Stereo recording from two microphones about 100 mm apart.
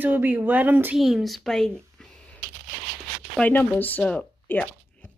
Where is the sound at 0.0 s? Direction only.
15° right (ahead or behind).